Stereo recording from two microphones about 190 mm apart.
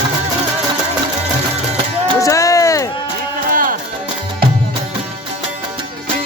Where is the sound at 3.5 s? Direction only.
50° right (ahead or behind).